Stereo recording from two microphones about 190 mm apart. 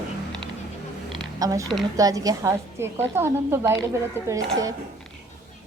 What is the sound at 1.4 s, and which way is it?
A woman's voice, 20° right (ahead or behind).